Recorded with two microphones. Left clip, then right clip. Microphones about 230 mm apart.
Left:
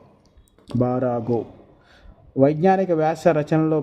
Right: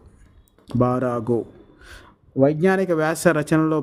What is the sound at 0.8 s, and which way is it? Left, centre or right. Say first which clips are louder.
Speech: right 1 dB; right.